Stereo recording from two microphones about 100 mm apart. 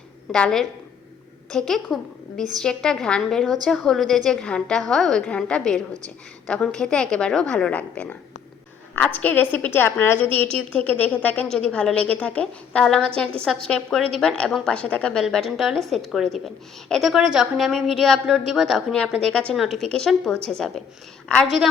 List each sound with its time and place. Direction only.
0.3 s a woman's voice: 5° left (ahead or behind); by 10.2 s 25° left (ahead or behind)
10.3 s a woman's voice: 15° left (ahead or behind)
15.2 s a woman's voice: centre (ahead or behind)
19.5 s a woman's voice: centre (ahead or behind)